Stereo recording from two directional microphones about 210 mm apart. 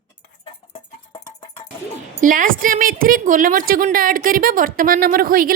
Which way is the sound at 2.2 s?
40° right (ahead or behind).